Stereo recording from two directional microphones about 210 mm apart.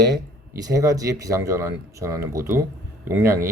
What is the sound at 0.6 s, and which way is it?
Speech, 15° right (ahead or behind).